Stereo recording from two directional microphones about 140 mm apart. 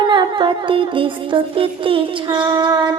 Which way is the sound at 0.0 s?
35° right (ahead or behind).